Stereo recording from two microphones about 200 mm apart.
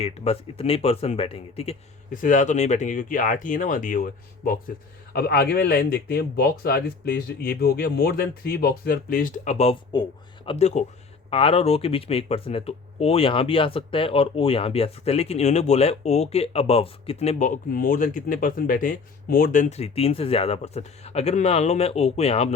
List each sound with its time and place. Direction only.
0.0 s speech: 30° left (ahead or behind)